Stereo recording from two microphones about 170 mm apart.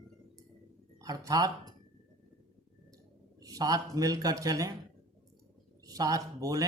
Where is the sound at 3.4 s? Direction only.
20° right (ahead or behind).